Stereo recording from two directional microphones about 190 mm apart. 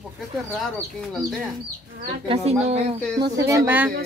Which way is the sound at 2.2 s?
30° right (ahead or behind).